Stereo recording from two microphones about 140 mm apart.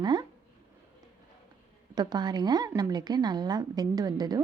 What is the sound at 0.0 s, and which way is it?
Speech, 30° right (ahead or behind).